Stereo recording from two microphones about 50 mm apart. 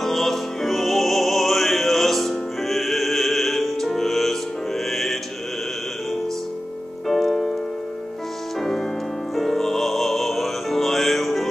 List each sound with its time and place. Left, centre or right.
0.0 s music: centre
7.1 s music: centre
8.5 s music: centre